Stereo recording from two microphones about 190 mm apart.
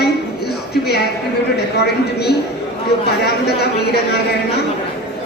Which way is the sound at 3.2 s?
60° left (ahead or behind).